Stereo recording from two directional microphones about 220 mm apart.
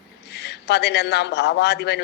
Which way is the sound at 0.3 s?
50° left (ahead or behind).